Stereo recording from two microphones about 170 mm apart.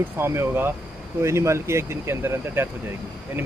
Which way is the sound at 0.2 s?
15° right (ahead or behind).